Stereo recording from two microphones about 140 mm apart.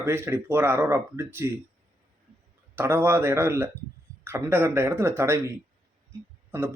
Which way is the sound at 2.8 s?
15° right (ahead or behind).